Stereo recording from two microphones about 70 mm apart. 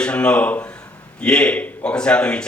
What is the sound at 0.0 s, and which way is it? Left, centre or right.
A man's voice, centre.